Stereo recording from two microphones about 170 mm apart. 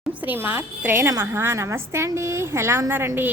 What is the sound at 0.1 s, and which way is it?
A woman's voice, 10° right (ahead or behind).